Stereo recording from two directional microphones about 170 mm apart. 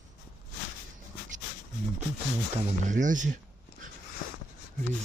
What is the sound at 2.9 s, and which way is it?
Speech, 50° right (ahead or behind).